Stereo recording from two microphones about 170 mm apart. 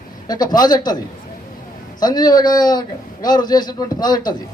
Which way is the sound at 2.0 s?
25° left (ahead or behind).